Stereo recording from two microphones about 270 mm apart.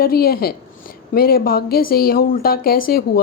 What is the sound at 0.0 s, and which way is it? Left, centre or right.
A woman's voice, left.